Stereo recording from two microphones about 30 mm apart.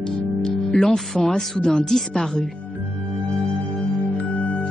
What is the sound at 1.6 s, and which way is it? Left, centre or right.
Speech, left.